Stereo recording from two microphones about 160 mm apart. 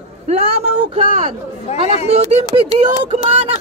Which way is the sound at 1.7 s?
40° left (ahead or behind).